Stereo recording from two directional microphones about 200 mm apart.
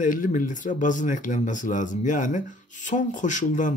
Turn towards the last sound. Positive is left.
turn(degrees=40)  # may be behind; listen again after turning